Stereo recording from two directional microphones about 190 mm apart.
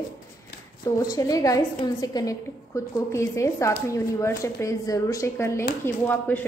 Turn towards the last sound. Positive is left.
turn(degrees=10)  # may be behind; listen again after turning